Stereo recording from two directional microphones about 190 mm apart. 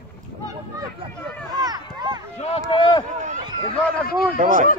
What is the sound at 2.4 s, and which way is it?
Speech, 30° left (ahead or behind).